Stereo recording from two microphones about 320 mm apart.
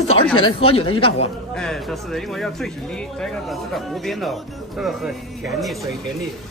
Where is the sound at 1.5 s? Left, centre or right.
Centre.